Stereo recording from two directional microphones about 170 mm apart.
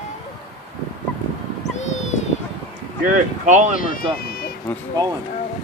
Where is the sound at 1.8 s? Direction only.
45° left (ahead or behind).